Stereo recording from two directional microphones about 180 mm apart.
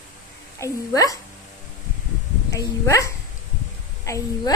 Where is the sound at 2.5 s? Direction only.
20° left (ahead or behind).